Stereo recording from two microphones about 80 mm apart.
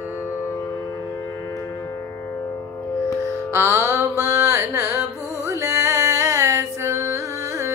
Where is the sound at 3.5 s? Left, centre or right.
Right.